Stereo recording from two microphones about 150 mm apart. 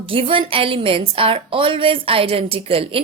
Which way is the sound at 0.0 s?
35° right (ahead or behind).